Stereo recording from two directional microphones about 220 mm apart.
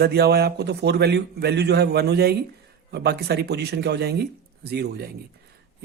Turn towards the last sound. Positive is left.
turn(degrees=-45)  # may be behind; listen again after turning